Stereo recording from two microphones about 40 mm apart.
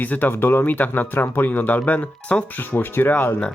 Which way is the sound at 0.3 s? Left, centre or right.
Left.